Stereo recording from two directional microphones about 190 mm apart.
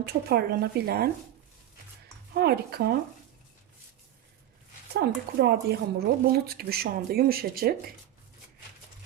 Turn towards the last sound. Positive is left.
turn(degrees=-50)  # may be behind; listen again after turning